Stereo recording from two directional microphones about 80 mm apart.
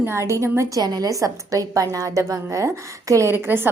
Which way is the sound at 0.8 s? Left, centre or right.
Right.